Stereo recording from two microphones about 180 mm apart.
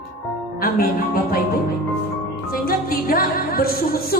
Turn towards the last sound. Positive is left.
turn(degrees=55)  # may be behind; listen again after turning